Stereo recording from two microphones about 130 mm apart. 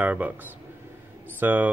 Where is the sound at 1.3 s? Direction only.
15° right (ahead or behind).